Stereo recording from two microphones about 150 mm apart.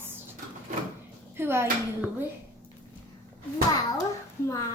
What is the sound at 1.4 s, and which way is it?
Speech, 15° right (ahead or behind).